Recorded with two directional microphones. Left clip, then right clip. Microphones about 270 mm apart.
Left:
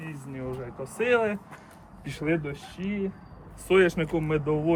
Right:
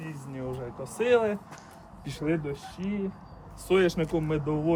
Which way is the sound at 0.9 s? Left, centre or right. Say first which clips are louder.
Even; centre.